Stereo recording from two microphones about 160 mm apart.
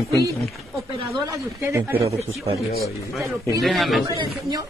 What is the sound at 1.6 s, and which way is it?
Speech, 15° right (ahead or behind).